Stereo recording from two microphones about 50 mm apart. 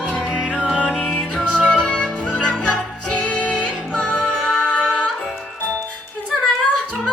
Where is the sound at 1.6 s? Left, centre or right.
Centre.